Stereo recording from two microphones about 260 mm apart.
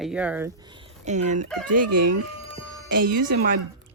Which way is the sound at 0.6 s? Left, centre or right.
Right.